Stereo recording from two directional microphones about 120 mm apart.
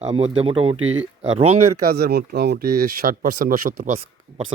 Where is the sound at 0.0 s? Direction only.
55° right (ahead or behind).